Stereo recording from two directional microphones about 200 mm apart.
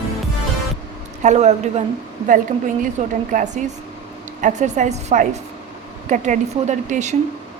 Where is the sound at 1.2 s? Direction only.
35° right (ahead or behind).